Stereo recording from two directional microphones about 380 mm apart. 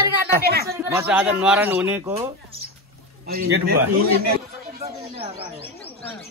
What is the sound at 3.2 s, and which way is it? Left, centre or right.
Speech, right.